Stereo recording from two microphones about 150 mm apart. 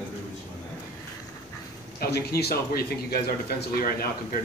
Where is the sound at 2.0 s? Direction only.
90° left.